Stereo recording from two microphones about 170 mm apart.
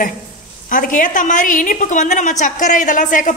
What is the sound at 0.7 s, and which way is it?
A woman's voice, 55° left (ahead or behind).